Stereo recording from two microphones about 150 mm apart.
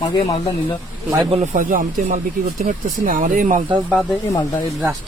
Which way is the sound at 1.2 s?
45° right (ahead or behind).